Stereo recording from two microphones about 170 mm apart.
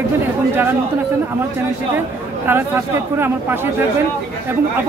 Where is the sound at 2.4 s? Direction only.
15° right (ahead or behind).